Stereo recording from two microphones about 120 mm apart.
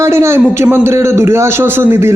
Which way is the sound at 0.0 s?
20° right (ahead or behind).